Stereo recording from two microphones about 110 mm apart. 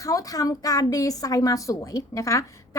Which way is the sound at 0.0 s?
30° left (ahead or behind).